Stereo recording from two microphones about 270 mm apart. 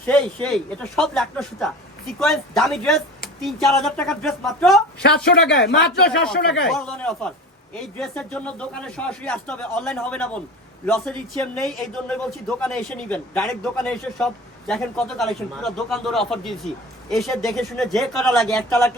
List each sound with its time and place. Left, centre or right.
0.0 s a man's voice: centre
5.0 s speech: left
6.1 s a man's voice: centre